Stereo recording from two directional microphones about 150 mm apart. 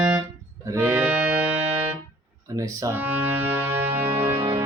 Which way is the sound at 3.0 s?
10° right (ahead or behind).